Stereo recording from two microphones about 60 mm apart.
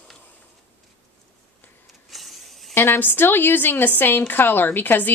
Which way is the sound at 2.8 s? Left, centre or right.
Left.